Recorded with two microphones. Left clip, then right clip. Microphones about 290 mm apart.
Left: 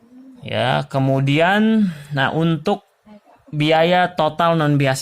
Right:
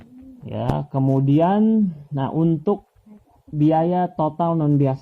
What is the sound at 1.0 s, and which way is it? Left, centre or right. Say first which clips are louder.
Speech: left 1 dB; left.